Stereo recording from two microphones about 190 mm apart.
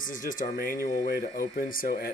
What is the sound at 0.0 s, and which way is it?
Speech, 45° left (ahead or behind).